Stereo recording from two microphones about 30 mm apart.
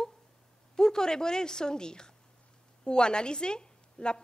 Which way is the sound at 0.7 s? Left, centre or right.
Left.